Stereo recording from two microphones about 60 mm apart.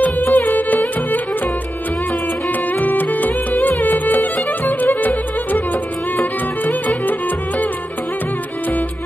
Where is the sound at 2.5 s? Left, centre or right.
Left.